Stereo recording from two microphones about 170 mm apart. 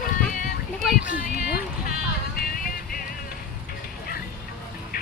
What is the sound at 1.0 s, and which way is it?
Music, 55° left (ahead or behind).